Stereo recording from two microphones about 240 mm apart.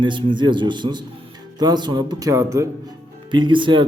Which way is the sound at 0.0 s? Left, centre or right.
Centre.